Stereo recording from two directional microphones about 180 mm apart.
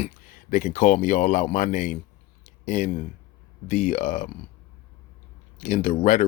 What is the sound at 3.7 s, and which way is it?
Speech, 40° left (ahead or behind).